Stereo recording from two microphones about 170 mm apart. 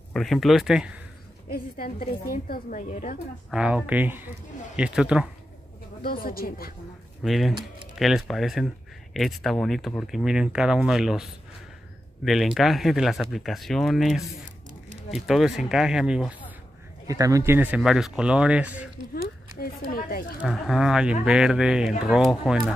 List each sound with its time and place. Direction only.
0.1 s speech: centre (ahead or behind)
2.3 s a woman's voice: 60° left (ahead or behind)
2.9 s a woman's voice: 45° left (ahead or behind)
3.4 s speech: 5° right (ahead or behind)
6.0 s a woman's voice: 60° left (ahead or behind)
7.2 s speech: centre (ahead or behind)
17.1 s speech: 20° right (ahead or behind)
19.6 s a woman's voice: 60° left (ahead or behind)
20.3 s speech: 5° right (ahead or behind)